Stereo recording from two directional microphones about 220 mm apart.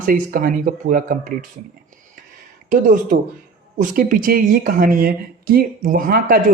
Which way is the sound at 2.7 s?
35° right (ahead or behind).